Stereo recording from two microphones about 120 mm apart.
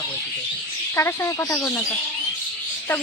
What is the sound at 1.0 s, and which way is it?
Speech, 20° left (ahead or behind).